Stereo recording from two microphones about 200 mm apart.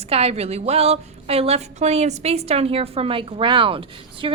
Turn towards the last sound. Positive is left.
turn(degrees=-25)  # may be behind; listen again after turning